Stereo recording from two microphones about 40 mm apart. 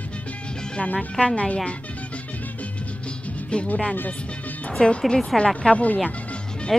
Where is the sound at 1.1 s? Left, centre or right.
Left.